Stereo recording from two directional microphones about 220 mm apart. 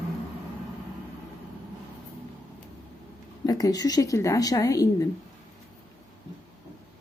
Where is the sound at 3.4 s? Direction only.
15° left (ahead or behind).